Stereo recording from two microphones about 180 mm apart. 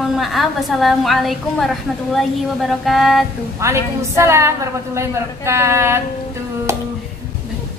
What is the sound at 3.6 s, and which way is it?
A woman's voice, 15° right (ahead or behind).